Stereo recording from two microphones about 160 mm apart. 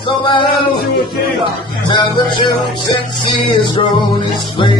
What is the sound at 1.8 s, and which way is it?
Music, 30° left (ahead or behind).